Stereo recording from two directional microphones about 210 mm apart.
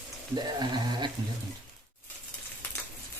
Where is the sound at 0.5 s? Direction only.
20° right (ahead or behind).